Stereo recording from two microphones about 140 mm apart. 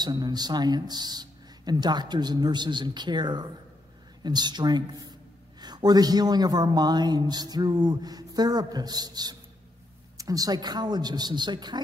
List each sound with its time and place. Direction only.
0.0 s a man's voice: 30° right (ahead or behind)